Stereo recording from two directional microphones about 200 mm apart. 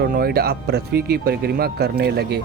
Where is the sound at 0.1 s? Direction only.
50° right (ahead or behind).